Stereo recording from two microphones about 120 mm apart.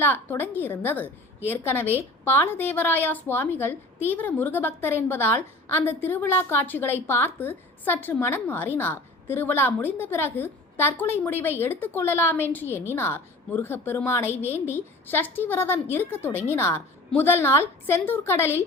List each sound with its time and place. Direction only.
0.0 s a woman's voice: 15° left (ahead or behind)